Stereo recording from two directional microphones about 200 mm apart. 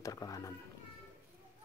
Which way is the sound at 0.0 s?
15° left (ahead or behind).